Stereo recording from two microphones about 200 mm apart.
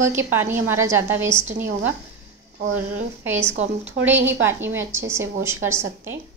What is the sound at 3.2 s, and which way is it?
A woman's voice, 10° right (ahead or behind).